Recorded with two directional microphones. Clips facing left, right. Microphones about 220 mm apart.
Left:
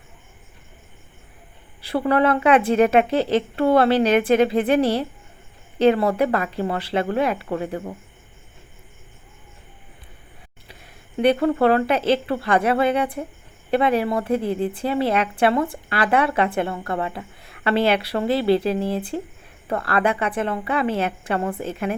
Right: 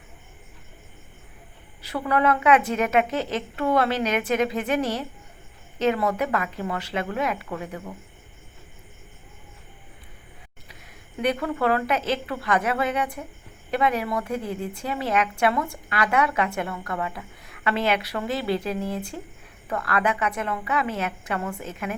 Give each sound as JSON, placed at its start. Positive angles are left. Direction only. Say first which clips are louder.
{"t": 1.8, "sound": "a woman's voice", "louder": "left 4 dB", "side_deg": 30}
{"t": 10.7, "sound": "a woman's voice", "louder": "left 3 dB", "side_deg": 30}